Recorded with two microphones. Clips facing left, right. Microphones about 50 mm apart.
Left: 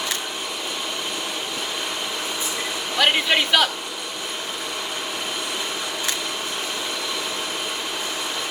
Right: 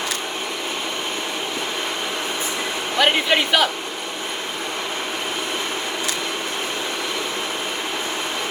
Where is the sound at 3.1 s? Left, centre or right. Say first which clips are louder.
Right 1 dB; centre.